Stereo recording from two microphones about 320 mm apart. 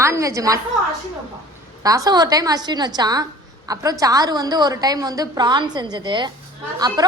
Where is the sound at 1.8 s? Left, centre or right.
Centre.